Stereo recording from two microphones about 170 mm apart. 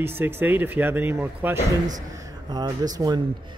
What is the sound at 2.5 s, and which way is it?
Speech, 25° right (ahead or behind).